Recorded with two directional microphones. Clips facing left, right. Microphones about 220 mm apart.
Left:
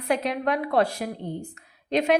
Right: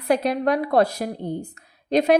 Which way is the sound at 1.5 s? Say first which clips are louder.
Right 4 dB; 35° right (ahead or behind).